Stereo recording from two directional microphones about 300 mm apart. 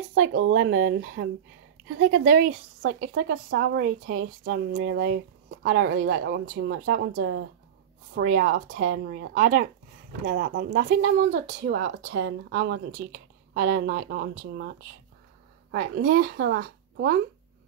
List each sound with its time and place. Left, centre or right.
0.1 s speech: right
5.9 s speech: right